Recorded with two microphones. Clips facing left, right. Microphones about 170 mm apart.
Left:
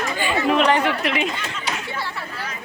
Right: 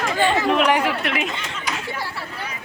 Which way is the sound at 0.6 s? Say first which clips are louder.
Left 1 dB; 10° right (ahead or behind).